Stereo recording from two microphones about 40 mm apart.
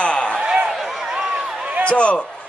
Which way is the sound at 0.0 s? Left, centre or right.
Left.